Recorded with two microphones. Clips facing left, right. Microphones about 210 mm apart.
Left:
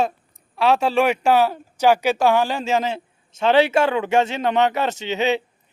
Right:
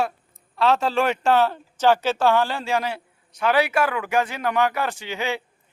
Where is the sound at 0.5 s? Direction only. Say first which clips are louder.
Left 2 dB; 10° left (ahead or behind).